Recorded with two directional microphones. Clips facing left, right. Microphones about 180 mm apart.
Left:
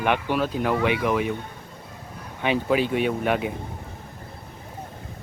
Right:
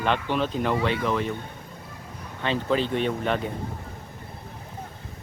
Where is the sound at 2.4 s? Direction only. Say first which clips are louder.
Left 3 dB; 10° left (ahead or behind).